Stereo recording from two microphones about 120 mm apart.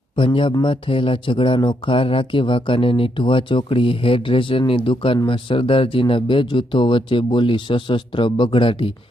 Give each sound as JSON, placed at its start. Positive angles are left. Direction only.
{"t": 0.5, "sound": "speech", "side_deg": 45}